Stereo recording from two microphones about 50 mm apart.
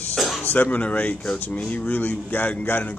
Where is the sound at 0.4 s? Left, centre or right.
Left.